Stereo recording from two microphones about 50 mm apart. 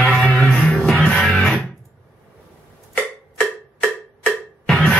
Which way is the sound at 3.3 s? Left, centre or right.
Left.